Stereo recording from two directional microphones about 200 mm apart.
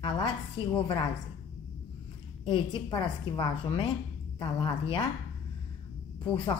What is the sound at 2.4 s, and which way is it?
A woman's voice, 25° left (ahead or behind).